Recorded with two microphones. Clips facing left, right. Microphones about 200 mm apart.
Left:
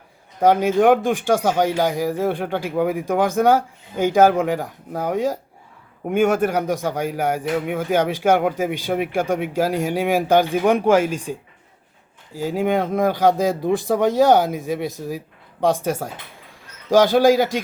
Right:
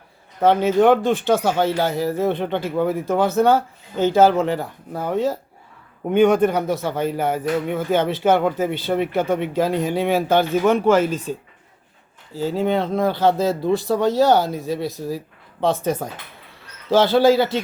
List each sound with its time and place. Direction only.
0.3 s speech: 10° left (ahead or behind)